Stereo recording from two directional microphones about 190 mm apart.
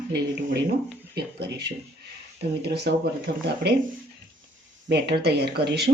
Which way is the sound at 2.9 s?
65° right (ahead or behind).